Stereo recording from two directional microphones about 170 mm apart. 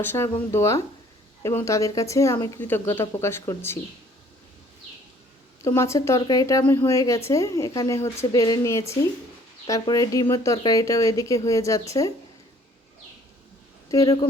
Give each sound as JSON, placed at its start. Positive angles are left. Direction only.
{"t": 0.0, "sound": "speech", "side_deg": 15}
{"t": 5.6, "sound": "speech", "side_deg": 15}
{"t": 13.9, "sound": "speech", "side_deg": 20}